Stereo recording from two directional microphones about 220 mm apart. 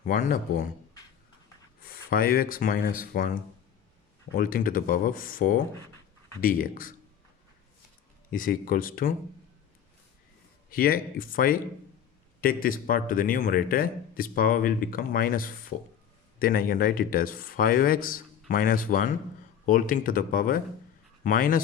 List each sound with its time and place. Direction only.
0.0 s a man's voice: 40° left (ahead or behind)
1.8 s speech: 40° left (ahead or behind)
4.4 s a man's voice: 40° left (ahead or behind)
8.3 s a man's voice: 40° left (ahead or behind)
10.7 s a man's voice: 40° left (ahead or behind)